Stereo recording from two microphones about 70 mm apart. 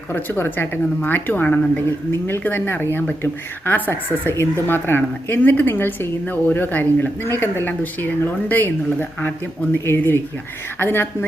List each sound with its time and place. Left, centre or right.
0.1 s speech: left